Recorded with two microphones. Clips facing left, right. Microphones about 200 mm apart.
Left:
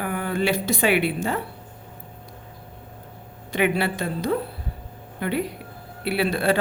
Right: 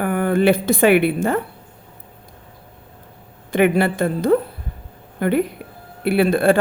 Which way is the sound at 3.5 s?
50° right (ahead or behind).